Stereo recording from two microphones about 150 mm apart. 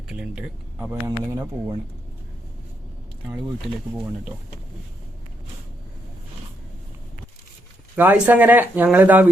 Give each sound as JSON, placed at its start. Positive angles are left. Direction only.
{"t": 0.1, "sound": "speech", "side_deg": -10}
{"t": 1.0, "sound": "speech", "side_deg": -20}
{"t": 7.9, "sound": "speech", "side_deg": -10}